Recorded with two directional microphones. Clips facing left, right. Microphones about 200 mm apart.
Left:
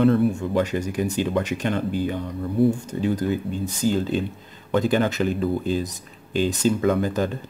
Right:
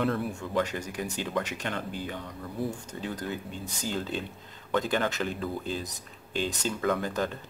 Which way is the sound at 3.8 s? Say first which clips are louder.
Left 10 dB; 5° left (ahead or behind).